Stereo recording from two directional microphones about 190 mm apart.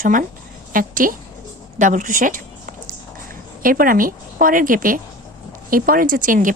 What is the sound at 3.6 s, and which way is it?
A woman's voice, 50° right (ahead or behind).